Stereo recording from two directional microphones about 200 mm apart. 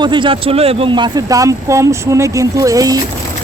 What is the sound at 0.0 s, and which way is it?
Speech, 25° right (ahead or behind).